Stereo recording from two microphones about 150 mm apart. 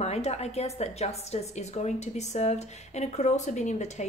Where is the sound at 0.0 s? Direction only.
45° left (ahead or behind).